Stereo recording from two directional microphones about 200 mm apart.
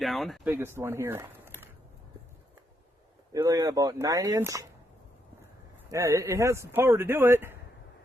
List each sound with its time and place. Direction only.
0.0 s speech: centre (ahead or behind)
0.5 s speech: 10° right (ahead or behind)
3.3 s speech: 15° right (ahead or behind)
5.9 s speech: 15° right (ahead or behind)